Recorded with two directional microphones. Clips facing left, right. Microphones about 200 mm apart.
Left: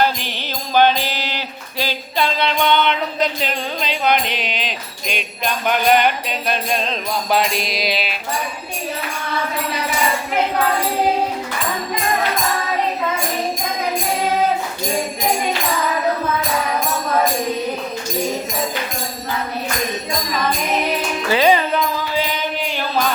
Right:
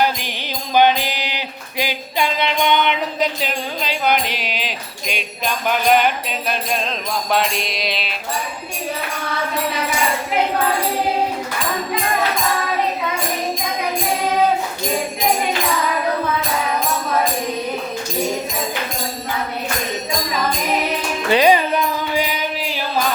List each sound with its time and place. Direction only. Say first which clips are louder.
0.8 s music: even; 15° right (ahead or behind)
7.3 s music: left 1 dB; 5° left (ahead or behind)
21.2 s music: right 1 dB; 15° right (ahead or behind)
22.1 s mantra: even; 15° right (ahead or behind)